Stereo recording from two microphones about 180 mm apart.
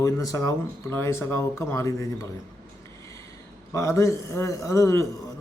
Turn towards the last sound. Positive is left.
turn(degrees=15)  # may be behind; listen again after turning